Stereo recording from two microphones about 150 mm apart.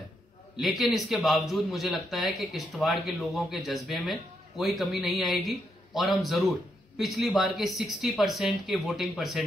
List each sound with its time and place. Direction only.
0.6 s a man's voice: centre (ahead or behind)